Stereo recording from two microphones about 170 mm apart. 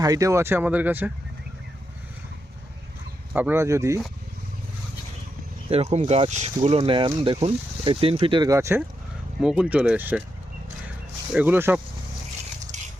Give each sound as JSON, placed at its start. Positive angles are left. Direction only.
{"t": 0.0, "sound": "speech", "side_deg": -20}
{"t": 3.3, "sound": "speech", "side_deg": -10}
{"t": 5.7, "sound": "speech", "side_deg": -35}
{"t": 9.4, "sound": "speech", "side_deg": -5}
{"t": 11.3, "sound": "speech", "side_deg": -10}